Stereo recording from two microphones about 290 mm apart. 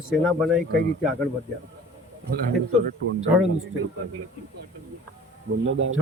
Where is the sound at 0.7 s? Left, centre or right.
Right.